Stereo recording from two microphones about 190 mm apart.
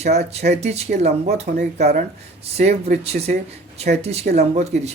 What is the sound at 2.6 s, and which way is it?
Speech, 35° right (ahead or behind).